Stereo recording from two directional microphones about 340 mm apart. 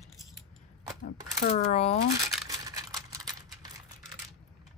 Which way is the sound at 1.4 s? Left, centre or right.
Centre.